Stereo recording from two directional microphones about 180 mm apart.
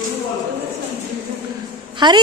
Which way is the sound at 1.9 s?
25° right (ahead or behind).